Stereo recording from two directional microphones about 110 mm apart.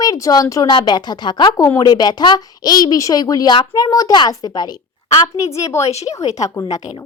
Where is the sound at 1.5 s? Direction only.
30° left (ahead or behind).